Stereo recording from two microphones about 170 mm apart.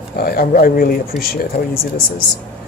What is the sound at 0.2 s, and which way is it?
Speech, 60° left (ahead or behind).